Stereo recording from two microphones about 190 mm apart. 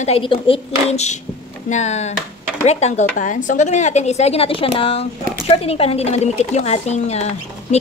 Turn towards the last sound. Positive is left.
turn(degrees=35)  # may be behind; listen again after turning